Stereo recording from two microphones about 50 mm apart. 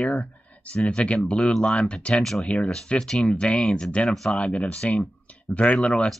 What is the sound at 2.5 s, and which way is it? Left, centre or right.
Speech, left.